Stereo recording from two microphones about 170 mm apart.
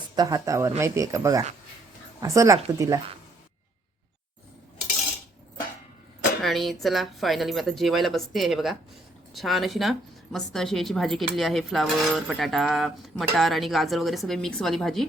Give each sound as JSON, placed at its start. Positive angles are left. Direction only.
{"t": 0.2, "sound": "speech", "side_deg": -20}
{"t": 6.4, "sound": "cutlery", "side_deg": 0}